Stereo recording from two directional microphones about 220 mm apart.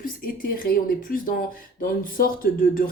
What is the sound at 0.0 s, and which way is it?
Speech, 40° left (ahead or behind).